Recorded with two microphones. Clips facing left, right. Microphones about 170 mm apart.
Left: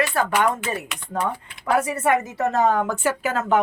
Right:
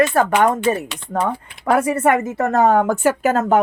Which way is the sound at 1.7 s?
55° right (ahead or behind).